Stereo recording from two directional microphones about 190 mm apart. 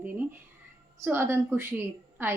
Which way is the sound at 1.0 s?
10° right (ahead or behind).